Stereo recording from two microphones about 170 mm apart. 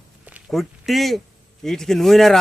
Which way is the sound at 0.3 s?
5° right (ahead or behind).